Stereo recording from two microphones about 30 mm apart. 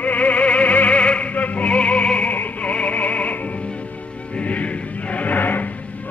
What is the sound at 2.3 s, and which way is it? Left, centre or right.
Music, left.